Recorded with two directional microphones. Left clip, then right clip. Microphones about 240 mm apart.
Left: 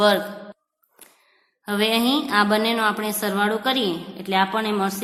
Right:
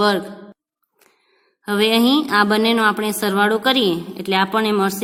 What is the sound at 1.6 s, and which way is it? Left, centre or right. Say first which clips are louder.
A woman's voice: right 4 dB; right.